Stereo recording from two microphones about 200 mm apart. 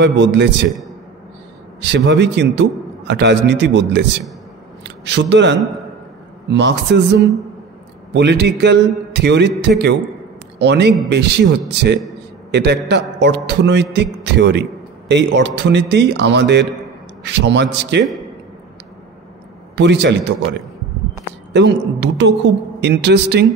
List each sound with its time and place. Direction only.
0.0 s a man's voice: 60° right (ahead or behind)
1.8 s a man's voice: 60° right (ahead or behind)
19.7 s a man's voice: 60° right (ahead or behind)
21.5 s a man's voice: 60° right (ahead or behind)